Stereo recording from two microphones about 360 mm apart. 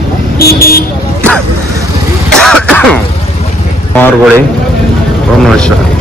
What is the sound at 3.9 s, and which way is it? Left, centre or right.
Speech, centre.